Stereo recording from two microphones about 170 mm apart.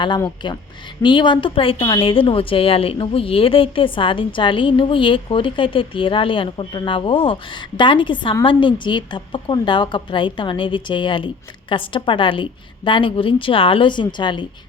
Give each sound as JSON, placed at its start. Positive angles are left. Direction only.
{"t": 0.4, "sound": "a woman's voice", "side_deg": 25}